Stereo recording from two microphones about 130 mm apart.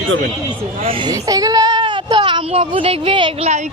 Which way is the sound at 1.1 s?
30° right (ahead or behind).